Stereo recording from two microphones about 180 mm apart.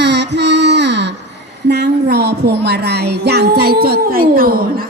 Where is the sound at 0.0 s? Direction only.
70° right (ahead or behind).